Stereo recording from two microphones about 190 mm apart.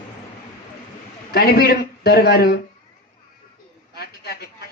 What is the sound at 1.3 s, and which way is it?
A woman's voice, 55° left (ahead or behind).